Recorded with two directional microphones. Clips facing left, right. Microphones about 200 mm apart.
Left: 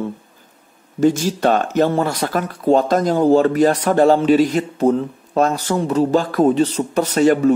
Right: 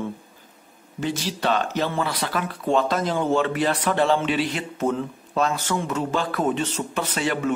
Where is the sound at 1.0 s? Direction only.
45° left (ahead or behind).